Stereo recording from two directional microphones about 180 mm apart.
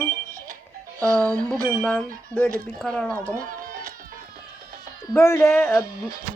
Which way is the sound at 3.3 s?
50° right (ahead or behind).